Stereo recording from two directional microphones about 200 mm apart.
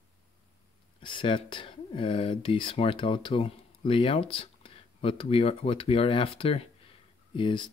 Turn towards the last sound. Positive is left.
turn(degrees=25)  # may be behind; listen again after turning